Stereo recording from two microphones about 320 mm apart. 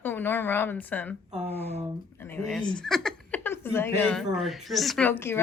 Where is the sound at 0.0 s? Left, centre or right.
Centre.